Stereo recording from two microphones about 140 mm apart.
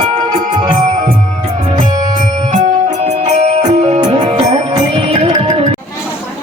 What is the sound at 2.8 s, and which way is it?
Music, 50° right (ahead or behind).